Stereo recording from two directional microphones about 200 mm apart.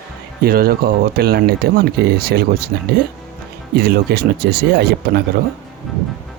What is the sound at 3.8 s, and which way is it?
Speech, 55° right (ahead or behind).